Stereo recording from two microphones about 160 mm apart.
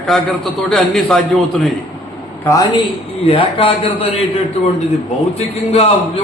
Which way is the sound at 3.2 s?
35° left (ahead or behind).